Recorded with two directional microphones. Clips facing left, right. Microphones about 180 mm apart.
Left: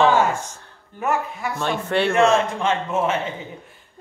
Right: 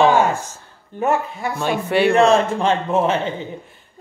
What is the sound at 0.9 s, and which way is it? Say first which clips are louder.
Speech: right 4 dB; 30° right (ahead or behind).